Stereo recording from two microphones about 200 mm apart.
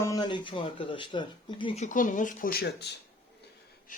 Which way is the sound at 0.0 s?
20° left (ahead or behind).